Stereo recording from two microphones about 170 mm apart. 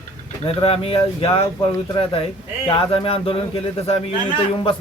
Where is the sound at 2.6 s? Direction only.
30° left (ahead or behind).